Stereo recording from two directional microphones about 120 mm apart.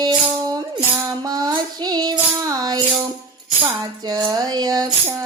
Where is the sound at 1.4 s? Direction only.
35° right (ahead or behind).